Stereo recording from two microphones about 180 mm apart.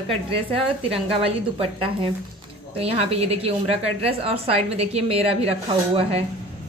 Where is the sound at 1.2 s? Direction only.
30° right (ahead or behind).